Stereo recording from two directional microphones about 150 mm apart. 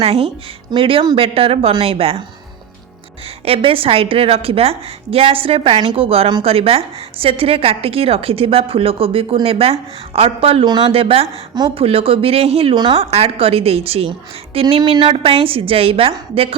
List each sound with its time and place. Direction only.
0.0 s a woman's voice: 40° right (ahead or behind)
3.4 s a woman's voice: 40° right (ahead or behind)
11.5 s a woman's voice: 30° right (ahead or behind)
11.8 s a woman's voice: 40° right (ahead or behind)